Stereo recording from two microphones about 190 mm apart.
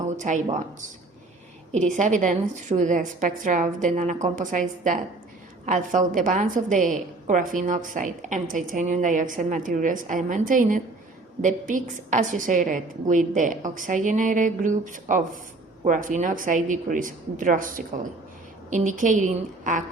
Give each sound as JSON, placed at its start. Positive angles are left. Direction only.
{"t": 0.2, "sound": "a woman's voice", "side_deg": -40}
{"t": 1.7, "sound": "a woman's voice", "side_deg": -40}